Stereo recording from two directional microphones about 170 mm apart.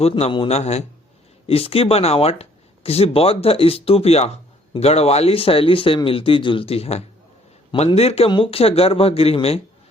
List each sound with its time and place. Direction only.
0.0 s speech: 35° left (ahead or behind)